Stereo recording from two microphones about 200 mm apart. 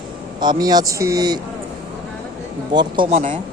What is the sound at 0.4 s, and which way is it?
Speech, 20° right (ahead or behind).